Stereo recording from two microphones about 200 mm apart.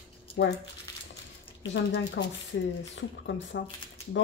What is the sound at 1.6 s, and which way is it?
Speech, 65° left (ahead or behind).